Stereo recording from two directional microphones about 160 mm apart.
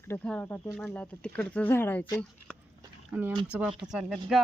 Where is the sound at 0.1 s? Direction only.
10° left (ahead or behind).